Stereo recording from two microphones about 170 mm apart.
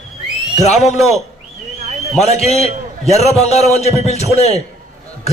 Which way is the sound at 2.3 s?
40° left (ahead or behind).